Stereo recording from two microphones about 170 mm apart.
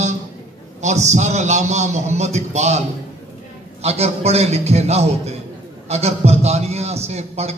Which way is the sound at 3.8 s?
40° right (ahead or behind).